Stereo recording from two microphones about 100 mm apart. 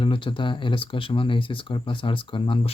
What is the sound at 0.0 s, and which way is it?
Speech, 55° left (ahead or behind).